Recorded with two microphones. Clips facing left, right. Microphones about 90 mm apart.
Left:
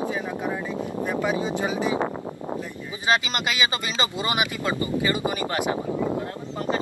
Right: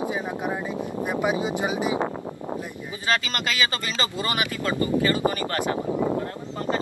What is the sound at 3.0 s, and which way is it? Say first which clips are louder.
Speech: left 2 dB; 20° left (ahead or behind).